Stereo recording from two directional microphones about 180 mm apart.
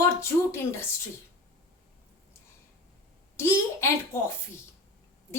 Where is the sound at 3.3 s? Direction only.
15° left (ahead or behind).